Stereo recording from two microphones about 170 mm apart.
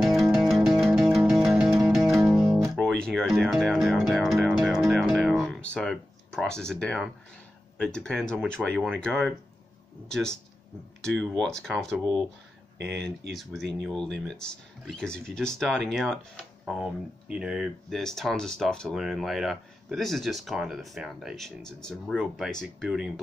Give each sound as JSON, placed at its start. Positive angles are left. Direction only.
{"t": 0.0, "sound": "music", "side_deg": 0}
{"t": 7.7, "sound": "speech", "side_deg": 5}
{"t": 11.0, "sound": "speech", "side_deg": 5}
{"t": 12.7, "sound": "speech", "side_deg": -90}
{"t": 13.3, "sound": "speech", "side_deg": 0}